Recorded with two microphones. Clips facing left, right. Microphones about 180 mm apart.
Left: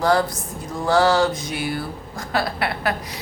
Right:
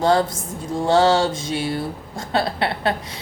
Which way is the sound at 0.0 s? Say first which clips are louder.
Right 1 dB; 25° right (ahead or behind).